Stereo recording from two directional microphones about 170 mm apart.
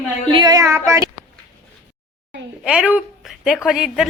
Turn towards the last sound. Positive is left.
turn(degrees=-5)  # may be behind; listen again after turning